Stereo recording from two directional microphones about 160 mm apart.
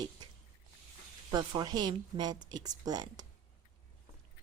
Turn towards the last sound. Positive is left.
turn(degrees=-25)  # may be behind; listen again after turning